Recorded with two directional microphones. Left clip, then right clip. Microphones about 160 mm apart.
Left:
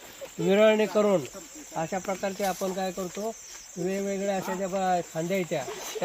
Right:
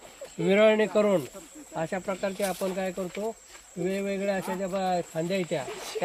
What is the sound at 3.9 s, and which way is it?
Speech, 35° right (ahead or behind).